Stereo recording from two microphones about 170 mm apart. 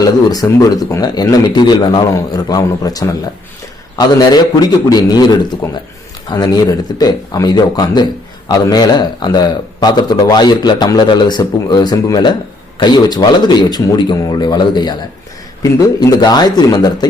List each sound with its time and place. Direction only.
0.0 s speech: 20° left (ahead or behind)
16.0 s speech: 25° left (ahead or behind)